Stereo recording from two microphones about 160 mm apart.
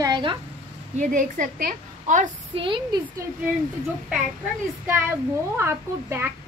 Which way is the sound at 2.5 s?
30° right (ahead or behind).